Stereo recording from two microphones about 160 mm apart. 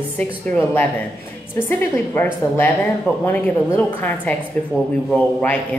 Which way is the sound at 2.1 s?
10° left (ahead or behind).